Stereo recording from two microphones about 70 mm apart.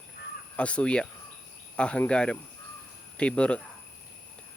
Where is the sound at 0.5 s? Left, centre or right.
Centre.